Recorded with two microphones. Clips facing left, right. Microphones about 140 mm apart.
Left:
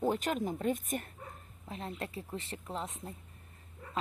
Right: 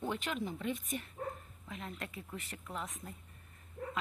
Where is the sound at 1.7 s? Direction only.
30° left (ahead or behind).